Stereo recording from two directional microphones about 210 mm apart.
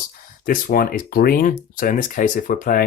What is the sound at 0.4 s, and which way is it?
Speech, 40° left (ahead or behind).